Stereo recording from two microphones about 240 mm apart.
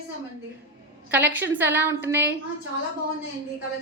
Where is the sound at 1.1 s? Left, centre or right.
Centre.